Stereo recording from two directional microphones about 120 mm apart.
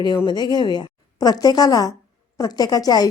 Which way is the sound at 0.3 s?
35° left (ahead or behind).